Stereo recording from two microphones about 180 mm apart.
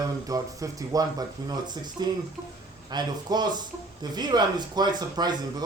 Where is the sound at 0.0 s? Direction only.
20° right (ahead or behind).